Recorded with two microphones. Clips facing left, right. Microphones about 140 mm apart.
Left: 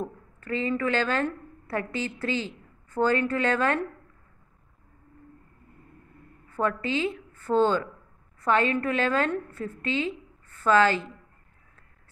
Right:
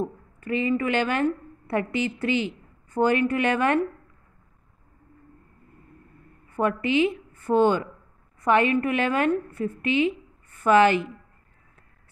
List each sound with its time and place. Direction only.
0.0 s a woman's voice: 15° right (ahead or behind)
6.5 s a woman's voice: 15° right (ahead or behind)